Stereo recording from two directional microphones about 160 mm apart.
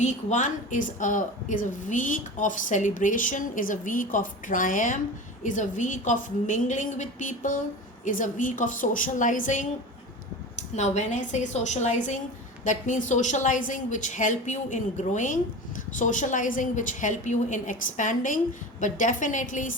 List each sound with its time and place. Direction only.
0.0 s a woman's voice: 50° left (ahead or behind)
10.8 s a woman's voice: 45° left (ahead or behind)